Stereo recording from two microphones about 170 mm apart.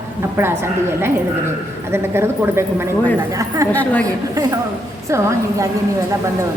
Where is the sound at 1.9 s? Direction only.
15° right (ahead or behind).